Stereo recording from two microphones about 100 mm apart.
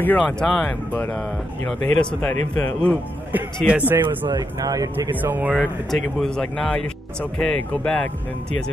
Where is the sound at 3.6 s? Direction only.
15° right (ahead or behind).